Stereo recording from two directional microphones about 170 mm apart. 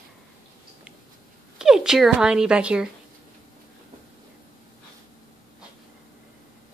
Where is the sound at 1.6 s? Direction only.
5° right (ahead or behind).